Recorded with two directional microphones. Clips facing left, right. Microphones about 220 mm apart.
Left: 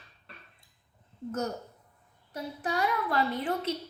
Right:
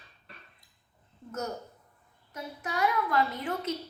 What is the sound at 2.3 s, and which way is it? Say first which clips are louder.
Speech: left 3 dB; 30° left (ahead or behind).